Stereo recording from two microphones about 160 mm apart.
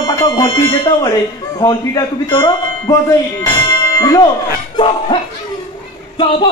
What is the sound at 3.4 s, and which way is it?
Music, 20° left (ahead or behind).